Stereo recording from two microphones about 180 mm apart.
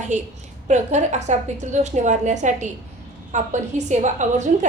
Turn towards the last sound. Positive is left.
turn(degrees=-40)  # may be behind; listen again after turning